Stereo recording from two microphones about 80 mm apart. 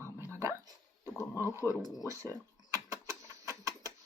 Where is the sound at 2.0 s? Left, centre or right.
Right.